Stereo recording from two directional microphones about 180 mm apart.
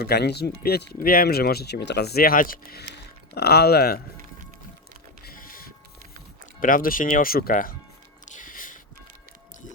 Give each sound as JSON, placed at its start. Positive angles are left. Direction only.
{"t": 0.0, "sound": "speech", "side_deg": 65}
{"t": 5.2, "sound": "printer", "side_deg": 50}
{"t": 6.6, "sound": "speech", "side_deg": 50}
{"t": 8.2, "sound": "music", "side_deg": 45}